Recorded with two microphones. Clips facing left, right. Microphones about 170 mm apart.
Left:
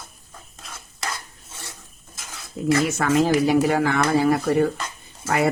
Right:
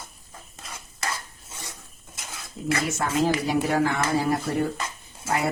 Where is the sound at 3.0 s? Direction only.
75° left (ahead or behind).